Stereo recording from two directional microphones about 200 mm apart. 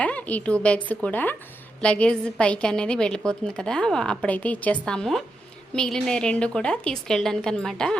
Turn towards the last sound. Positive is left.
turn(degrees=5)  # may be behind; listen again after turning